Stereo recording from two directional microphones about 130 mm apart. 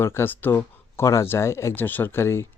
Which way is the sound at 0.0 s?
20° left (ahead or behind).